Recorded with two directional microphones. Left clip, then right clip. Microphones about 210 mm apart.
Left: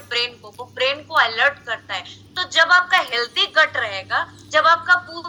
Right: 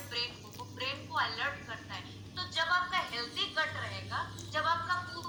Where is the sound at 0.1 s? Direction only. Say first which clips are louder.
Left 15 dB; 40° left (ahead or behind).